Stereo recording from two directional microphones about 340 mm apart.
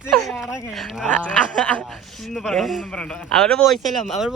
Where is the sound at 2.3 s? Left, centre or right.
Centre.